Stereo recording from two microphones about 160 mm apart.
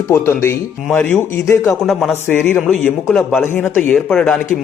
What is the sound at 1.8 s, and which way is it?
A man's voice, centre (ahead or behind).